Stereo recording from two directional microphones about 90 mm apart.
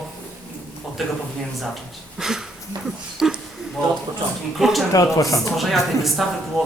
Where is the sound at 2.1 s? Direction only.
5° right (ahead or behind).